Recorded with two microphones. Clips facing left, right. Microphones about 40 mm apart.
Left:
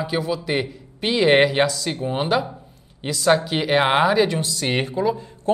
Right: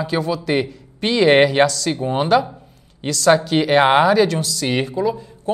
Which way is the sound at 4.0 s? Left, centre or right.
Centre.